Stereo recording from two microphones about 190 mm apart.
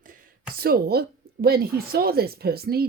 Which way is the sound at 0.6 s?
55° right (ahead or behind).